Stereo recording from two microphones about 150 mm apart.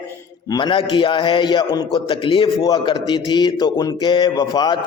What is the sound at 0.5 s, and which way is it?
Speech, 35° left (ahead or behind).